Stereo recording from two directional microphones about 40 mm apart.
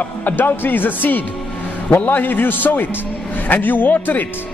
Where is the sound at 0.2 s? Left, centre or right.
Left.